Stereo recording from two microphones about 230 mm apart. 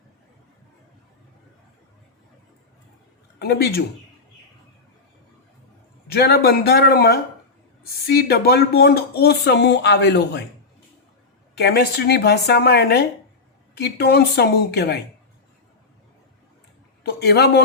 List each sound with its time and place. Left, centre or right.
3.3 s speech: left
6.1 s speech: left
11.6 s speech: left
17.0 s a man's voice: left